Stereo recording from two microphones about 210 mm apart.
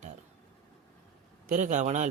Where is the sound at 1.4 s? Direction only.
35° right (ahead or behind).